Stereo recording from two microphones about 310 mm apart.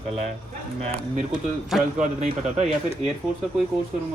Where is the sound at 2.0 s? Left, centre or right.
Right.